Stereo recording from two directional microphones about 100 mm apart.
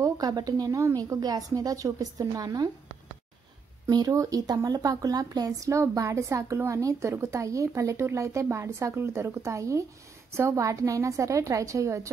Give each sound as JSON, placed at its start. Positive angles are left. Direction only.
{"t": 0.0, "sound": "speech", "side_deg": -40}
{"t": 3.9, "sound": "speech", "side_deg": -35}